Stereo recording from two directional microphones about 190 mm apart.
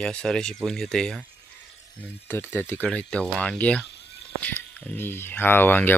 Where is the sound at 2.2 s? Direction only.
10° left (ahead or behind).